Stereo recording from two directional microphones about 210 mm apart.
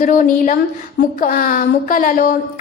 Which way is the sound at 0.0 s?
40° left (ahead or behind).